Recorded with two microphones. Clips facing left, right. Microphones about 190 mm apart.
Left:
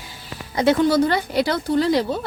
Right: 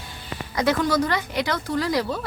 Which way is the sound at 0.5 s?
25° left (ahead or behind).